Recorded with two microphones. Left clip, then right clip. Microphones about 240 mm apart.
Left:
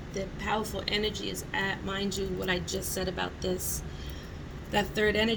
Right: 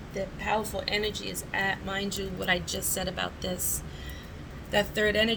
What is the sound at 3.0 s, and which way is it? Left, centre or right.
Speech, right.